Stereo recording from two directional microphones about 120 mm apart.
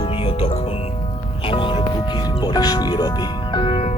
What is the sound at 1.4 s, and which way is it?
Music, 45° left (ahead or behind).